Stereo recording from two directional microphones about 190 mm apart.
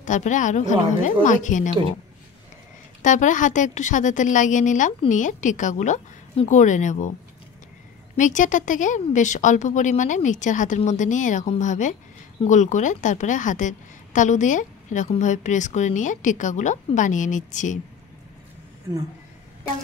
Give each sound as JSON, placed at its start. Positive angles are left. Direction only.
{"t": 0.0, "sound": "a woman's voice", "side_deg": 40}
{"t": 3.0, "sound": "a woman's voice", "side_deg": 40}
{"t": 8.2, "sound": "a woman's voice", "side_deg": 40}